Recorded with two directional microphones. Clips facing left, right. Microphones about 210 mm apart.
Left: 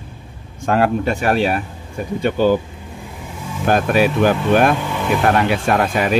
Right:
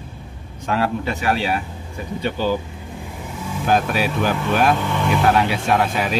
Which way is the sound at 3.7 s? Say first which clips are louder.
Left 4 dB; 55° left (ahead or behind).